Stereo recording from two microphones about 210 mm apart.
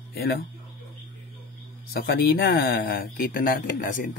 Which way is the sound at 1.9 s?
45° left (ahead or behind).